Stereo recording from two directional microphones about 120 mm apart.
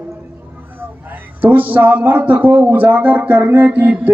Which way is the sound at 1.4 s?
15° right (ahead or behind).